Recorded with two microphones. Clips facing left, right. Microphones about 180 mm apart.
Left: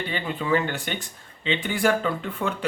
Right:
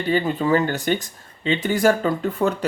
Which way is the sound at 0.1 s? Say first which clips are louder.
Right 7 dB; 40° right (ahead or behind).